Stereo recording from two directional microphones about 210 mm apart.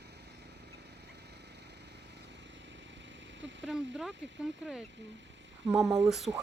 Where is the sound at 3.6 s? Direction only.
Centre (ahead or behind).